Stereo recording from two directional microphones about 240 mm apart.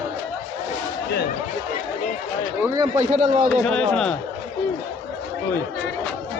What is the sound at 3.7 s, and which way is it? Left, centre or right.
Speech, centre.